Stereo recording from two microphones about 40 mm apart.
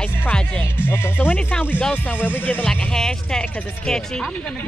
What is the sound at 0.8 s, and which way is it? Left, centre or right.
Speech, left.